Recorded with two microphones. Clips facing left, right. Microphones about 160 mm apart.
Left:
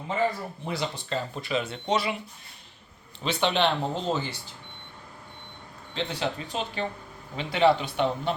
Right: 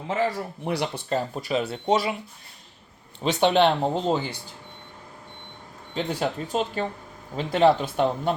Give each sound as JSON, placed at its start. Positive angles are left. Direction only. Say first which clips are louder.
{"t": 0.1, "sound": "speech", "louder": "right 2 dB", "side_deg": -75}
{"t": 3.2, "sound": "speech", "louder": "right 5 dB", "side_deg": -45}
{"t": 6.0, "sound": "speech", "louder": "right 3 dB", "side_deg": -45}